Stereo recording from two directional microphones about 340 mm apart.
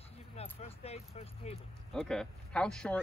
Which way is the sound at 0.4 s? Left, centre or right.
Centre.